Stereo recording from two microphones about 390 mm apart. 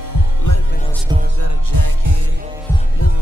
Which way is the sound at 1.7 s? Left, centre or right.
Right.